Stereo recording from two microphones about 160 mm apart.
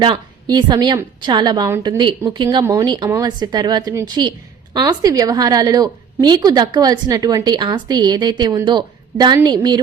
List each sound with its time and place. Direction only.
0.0 s a woman's voice: 25° right (ahead or behind)